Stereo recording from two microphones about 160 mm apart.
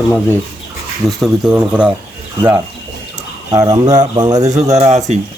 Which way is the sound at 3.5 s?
20° right (ahead or behind).